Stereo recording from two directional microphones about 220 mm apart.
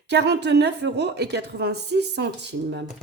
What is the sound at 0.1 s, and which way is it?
A woman's voice, 50° right (ahead or behind).